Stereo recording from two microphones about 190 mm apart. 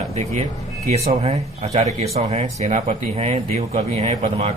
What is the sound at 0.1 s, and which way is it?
A man's voice, 35° right (ahead or behind).